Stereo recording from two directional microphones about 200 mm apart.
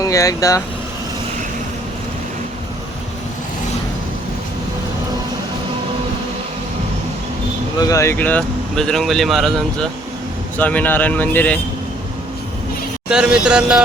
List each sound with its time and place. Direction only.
0.0 s speech: 15° left (ahead or behind)
7.8 s speech: 15° left (ahead or behind)
13.1 s speech: 5° right (ahead or behind)